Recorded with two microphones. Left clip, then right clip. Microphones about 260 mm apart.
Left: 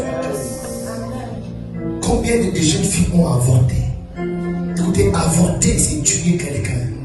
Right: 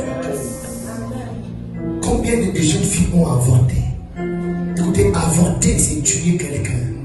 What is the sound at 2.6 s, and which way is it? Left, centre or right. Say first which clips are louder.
Music: left 1 dB; left.